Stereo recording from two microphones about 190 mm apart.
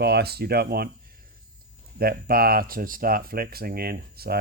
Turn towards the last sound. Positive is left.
turn(degrees=-55)  # may be behind; listen again after turning